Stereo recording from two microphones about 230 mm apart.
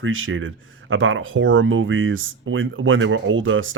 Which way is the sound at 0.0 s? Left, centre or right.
Right.